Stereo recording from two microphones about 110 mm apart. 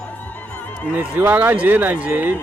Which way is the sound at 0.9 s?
15° right (ahead or behind).